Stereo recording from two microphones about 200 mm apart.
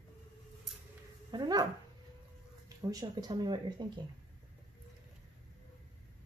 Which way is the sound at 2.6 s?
20° right (ahead or behind).